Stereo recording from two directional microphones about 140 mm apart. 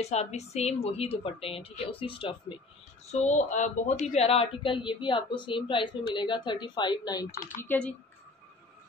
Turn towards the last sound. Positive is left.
turn(degrees=10)  # may be behind; listen again after turning